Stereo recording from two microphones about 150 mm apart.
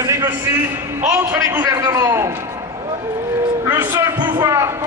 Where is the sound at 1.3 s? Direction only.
20° right (ahead or behind).